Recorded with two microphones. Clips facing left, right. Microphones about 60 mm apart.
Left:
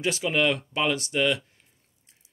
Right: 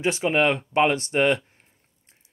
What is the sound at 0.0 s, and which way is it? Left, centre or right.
Speech, right.